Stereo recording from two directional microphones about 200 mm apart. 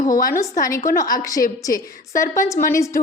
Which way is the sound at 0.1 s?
45° left (ahead or behind).